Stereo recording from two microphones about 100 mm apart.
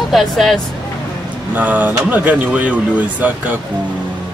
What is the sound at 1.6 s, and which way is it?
Speech, 15° right (ahead or behind).